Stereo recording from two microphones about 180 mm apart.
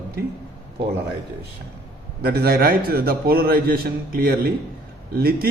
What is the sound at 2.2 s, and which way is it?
A man's voice, 60° right (ahead or behind).